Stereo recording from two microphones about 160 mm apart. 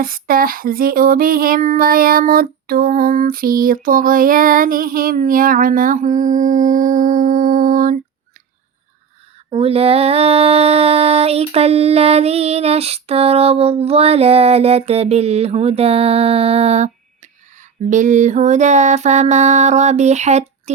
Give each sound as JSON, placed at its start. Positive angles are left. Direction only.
{"t": 0.0, "sound": "a sound", "side_deg": -65}
{"t": 9.5, "sound": "mantra", "side_deg": -40}
{"t": 17.8, "sound": "music", "side_deg": -50}